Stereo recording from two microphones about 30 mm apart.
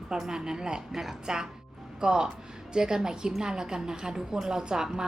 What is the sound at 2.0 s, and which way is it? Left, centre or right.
A woman's voice, right.